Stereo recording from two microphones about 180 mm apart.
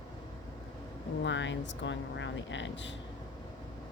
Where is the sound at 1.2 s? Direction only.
90° left.